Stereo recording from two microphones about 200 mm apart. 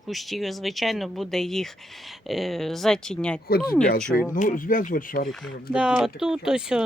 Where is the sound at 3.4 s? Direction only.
50° left (ahead or behind).